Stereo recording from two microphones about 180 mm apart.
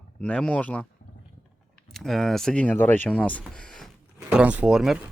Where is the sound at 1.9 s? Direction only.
Centre (ahead or behind).